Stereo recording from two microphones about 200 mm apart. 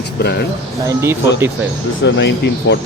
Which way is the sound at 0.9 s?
15° right (ahead or behind).